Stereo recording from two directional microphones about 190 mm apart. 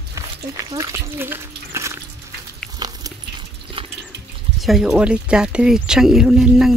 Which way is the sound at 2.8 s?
20° right (ahead or behind).